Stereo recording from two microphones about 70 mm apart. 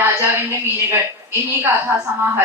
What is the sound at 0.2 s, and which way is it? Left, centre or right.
Speech, right.